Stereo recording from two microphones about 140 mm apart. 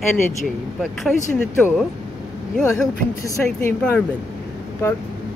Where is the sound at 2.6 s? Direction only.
20° left (ahead or behind).